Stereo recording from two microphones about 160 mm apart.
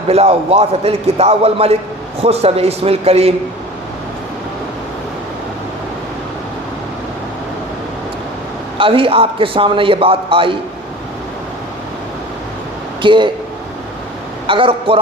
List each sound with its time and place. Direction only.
0.1 s a man's voice: 40° right (ahead or behind)
8.8 s a man's voice: 35° right (ahead or behind)
13.0 s speech: 30° right (ahead or behind)
14.4 s a man's voice: 35° right (ahead or behind)